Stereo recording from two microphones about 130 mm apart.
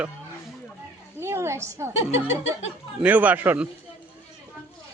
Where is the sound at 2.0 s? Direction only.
55° left (ahead or behind).